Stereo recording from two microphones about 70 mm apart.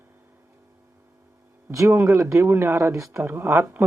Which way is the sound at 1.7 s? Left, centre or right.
Right.